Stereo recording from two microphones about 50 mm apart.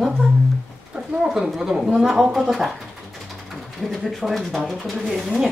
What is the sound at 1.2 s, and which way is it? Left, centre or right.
Speech, centre.